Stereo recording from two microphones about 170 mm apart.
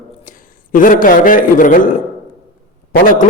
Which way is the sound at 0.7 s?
50° left (ahead or behind).